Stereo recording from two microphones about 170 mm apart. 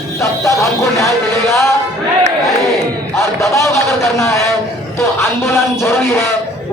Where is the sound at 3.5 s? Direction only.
15° left (ahead or behind).